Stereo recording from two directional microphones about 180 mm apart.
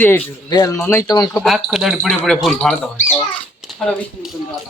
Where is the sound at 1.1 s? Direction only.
20° left (ahead or behind).